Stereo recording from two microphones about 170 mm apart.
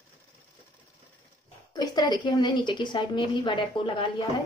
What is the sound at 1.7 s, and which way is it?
A woman's voice, 25° left (ahead or behind).